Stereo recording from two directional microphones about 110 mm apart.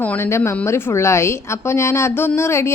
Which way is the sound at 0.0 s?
20° left (ahead or behind).